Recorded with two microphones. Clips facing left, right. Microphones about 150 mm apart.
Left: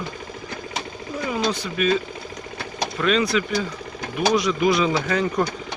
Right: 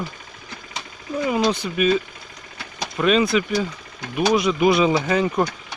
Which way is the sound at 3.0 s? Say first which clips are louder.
Right 3 dB; 15° right (ahead or behind).